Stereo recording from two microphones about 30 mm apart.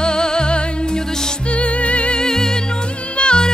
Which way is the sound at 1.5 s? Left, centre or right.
Left.